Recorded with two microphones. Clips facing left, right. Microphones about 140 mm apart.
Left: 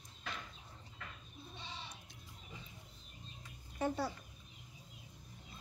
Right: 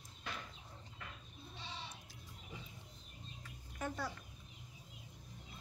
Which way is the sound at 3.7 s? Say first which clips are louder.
Left 5 dB; 30° left (ahead or behind).